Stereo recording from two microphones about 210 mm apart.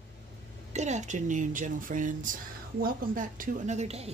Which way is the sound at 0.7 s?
35° right (ahead or behind).